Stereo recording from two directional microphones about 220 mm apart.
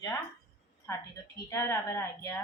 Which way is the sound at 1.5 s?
10° left (ahead or behind).